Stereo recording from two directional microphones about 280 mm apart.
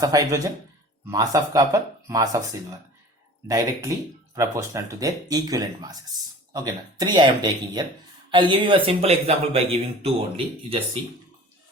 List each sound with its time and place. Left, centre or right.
0.0 s speech: centre
3.4 s speech: centre